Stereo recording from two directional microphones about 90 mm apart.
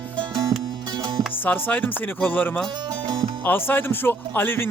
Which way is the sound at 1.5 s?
20° left (ahead or behind).